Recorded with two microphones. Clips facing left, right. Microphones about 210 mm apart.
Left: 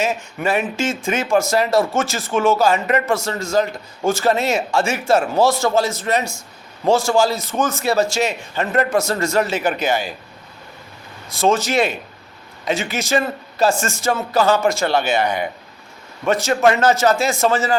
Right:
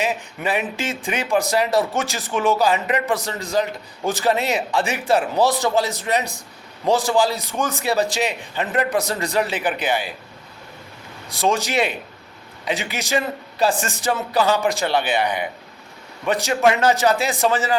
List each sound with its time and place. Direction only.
0.0 s a man's voice: 15° right (ahead or behind)
9.6 s speech: 40° left (ahead or behind)
11.3 s a man's voice: 15° right (ahead or behind)
15.0 s speech: 45° left (ahead or behind)
16.2 s a man's voice: 15° right (ahead or behind)